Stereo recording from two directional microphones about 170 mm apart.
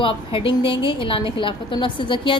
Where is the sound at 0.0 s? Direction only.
30° left (ahead or behind).